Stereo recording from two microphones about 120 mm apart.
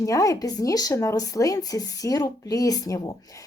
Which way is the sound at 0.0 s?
25° left (ahead or behind).